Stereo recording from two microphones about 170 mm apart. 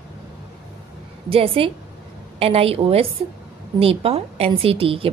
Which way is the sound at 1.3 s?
35° right (ahead or behind).